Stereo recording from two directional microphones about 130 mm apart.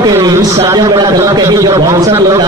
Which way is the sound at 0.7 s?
30° right (ahead or behind).